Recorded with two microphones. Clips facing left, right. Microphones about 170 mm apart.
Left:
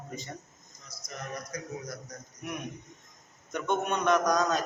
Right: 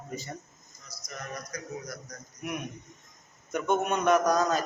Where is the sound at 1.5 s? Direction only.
25° left (ahead or behind).